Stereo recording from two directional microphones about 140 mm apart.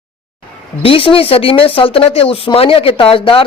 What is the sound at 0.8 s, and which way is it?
Speech, 40° left (ahead or behind).